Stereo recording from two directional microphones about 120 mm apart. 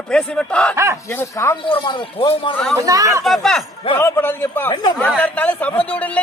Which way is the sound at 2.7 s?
30° right (ahead or behind).